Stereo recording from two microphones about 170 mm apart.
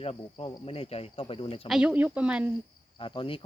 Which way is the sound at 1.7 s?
5° right (ahead or behind).